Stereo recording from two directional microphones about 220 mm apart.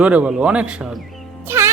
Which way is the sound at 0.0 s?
5° right (ahead or behind).